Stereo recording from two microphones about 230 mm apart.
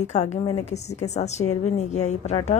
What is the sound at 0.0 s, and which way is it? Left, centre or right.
A woman's voice, left.